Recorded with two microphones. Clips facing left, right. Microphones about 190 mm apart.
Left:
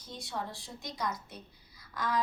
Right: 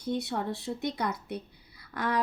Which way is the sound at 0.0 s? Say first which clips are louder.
Right 9 dB; 60° right (ahead or behind).